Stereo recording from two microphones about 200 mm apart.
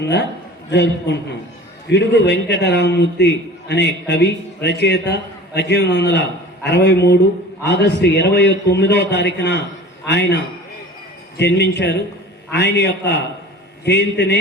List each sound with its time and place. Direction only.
0.0 s a man's voice: 60° left (ahead or behind)